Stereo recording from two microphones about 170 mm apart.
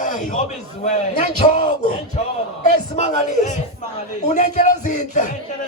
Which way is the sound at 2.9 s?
45° left (ahead or behind).